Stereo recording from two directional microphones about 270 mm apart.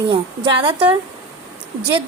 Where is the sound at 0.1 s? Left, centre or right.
Centre.